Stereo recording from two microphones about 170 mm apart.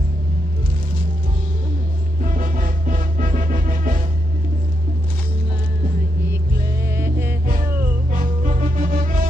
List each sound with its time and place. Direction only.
2.2 s music: 50° right (ahead or behind)
6.9 s music: 15° right (ahead or behind)
8.1 s music: 50° right (ahead or behind)